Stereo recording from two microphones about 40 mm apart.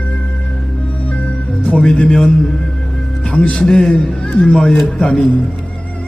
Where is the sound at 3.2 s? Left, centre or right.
Left.